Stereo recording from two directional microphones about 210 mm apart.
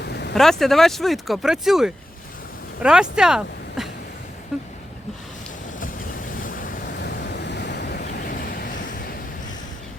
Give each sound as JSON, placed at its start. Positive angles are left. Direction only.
{"t": 0.0, "sound": "vehicle", "side_deg": 50}
{"t": 0.3, "sound": "speech", "side_deg": 0}
{"t": 6.3, "sound": "waves", "side_deg": 40}
{"t": 8.1, "sound": "vehicle", "side_deg": 40}